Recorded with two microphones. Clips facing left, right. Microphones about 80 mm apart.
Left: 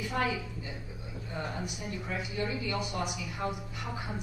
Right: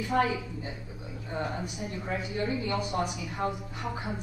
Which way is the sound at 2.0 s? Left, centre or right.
Right.